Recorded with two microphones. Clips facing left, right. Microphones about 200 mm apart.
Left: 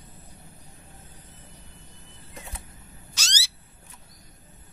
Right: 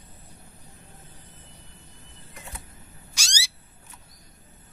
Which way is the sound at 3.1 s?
10° right (ahead or behind).